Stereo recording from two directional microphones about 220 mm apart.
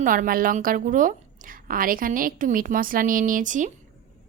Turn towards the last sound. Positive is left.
turn(degrees=-35)  # may be behind; listen again after turning